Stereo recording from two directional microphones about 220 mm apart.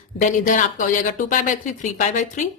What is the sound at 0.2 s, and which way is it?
Speech, 35° left (ahead or behind).